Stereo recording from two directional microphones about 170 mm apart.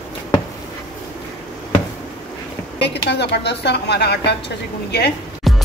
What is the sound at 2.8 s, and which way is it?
Speech, 80° left.